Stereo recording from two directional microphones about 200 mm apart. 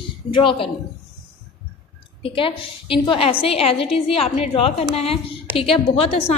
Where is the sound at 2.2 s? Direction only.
25° left (ahead or behind).